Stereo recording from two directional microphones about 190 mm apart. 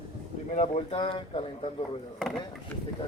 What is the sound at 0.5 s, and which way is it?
Speech, 35° left (ahead or behind).